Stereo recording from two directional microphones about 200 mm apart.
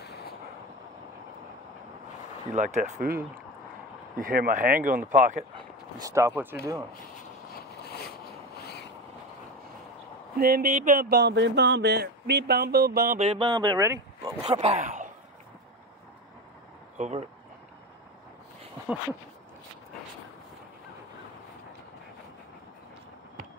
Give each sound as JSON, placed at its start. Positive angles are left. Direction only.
{"t": 0.0, "sound": "vehicle", "side_deg": 55}
{"t": 2.5, "sound": "speech", "side_deg": -40}
{"t": 4.2, "sound": "speech", "side_deg": -45}
{"t": 5.9, "sound": "speech", "side_deg": -15}
{"t": 10.3, "sound": "speech", "side_deg": -50}
{"t": 13.2, "sound": "speech", "side_deg": -30}
{"t": 14.5, "sound": "speech", "side_deg": -30}
{"t": 17.0, "sound": "speech", "side_deg": -35}